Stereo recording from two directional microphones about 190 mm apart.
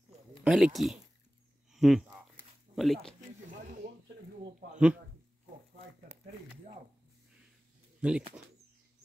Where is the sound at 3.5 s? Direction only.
40° right (ahead or behind).